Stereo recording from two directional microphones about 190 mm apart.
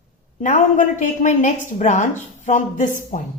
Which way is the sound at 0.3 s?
40° left (ahead or behind).